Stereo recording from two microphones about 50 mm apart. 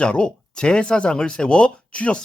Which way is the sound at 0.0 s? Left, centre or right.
Left.